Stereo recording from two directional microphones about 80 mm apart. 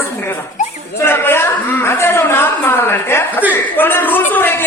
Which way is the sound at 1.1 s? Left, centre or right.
Left.